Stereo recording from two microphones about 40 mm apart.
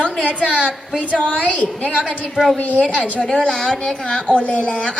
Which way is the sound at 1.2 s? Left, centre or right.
Left.